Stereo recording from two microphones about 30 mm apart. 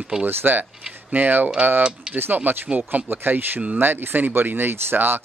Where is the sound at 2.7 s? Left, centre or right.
Right.